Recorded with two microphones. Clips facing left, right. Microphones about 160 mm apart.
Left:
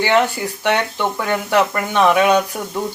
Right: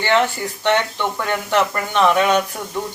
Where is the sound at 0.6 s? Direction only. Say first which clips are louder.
Even; 10° left (ahead or behind).